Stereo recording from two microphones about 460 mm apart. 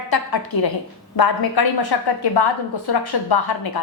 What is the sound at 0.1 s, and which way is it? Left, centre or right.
A woman's voice, left.